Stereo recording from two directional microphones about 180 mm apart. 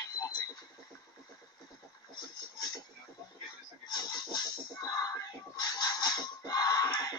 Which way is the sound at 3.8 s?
25° left (ahead or behind).